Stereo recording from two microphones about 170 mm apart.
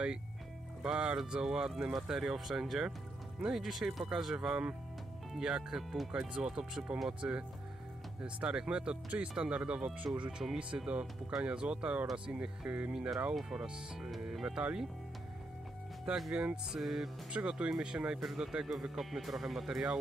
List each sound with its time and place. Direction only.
0.8 s speech: 5° right (ahead or behind)
16.1 s speech: 5° right (ahead or behind)